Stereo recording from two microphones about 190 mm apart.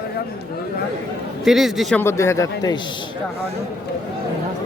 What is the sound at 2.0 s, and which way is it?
Speech, 15° left (ahead or behind).